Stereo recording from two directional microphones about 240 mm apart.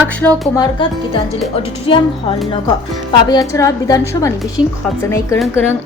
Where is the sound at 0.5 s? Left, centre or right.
Centre.